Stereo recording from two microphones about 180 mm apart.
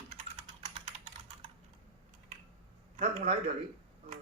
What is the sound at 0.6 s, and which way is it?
Computer keyboard, 40° right (ahead or behind).